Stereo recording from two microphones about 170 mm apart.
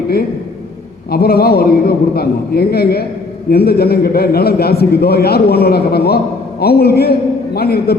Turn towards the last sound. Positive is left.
turn(degrees=65)  # may be behind; listen again after turning